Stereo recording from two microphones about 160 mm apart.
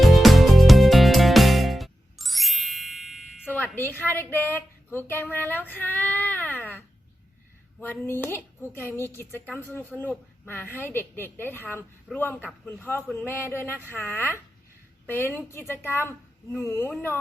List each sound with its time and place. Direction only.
0.0 s music: centre (ahead or behind)
3.4 s wind chime: 10° left (ahead or behind)
3.8 s a woman's voice: 10° left (ahead or behind)
5.5 s child singing: 10° left (ahead or behind)
7.8 s a woman's voice: 15° left (ahead or behind)